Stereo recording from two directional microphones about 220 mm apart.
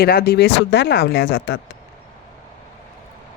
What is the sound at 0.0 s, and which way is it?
Speech, 45° left (ahead or behind).